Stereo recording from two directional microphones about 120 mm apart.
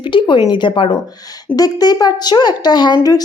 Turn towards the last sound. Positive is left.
turn(degrees=30)  # may be behind; listen again after turning